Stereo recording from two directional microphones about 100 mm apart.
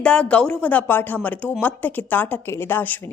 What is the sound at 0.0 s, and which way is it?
A woman's voice, 10° left (ahead or behind).